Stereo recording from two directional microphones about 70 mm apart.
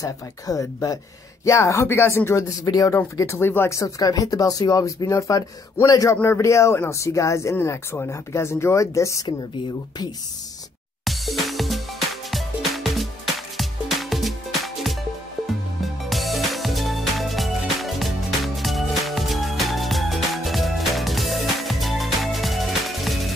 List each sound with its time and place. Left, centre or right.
0.0 s speech: left
2.6 s speech: left
3.2 s speech: left
3.8 s speech: left
11.1 s music: centre